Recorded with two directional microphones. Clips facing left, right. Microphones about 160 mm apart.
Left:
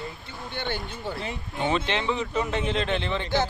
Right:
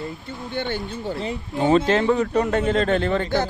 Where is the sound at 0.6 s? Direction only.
45° right (ahead or behind).